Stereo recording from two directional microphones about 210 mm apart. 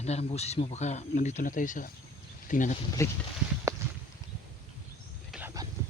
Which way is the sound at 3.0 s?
15° left (ahead or behind).